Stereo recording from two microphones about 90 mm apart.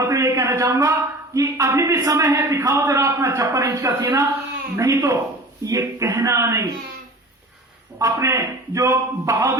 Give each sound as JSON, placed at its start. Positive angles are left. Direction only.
{"t": 0.0, "sound": "a man's voice", "side_deg": -40}
{"t": 7.9, "sound": "a man's voice", "side_deg": -35}